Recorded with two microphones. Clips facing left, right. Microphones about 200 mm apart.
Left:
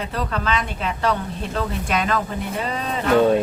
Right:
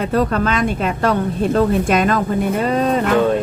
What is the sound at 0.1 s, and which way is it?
Speech, 45° right (ahead or behind).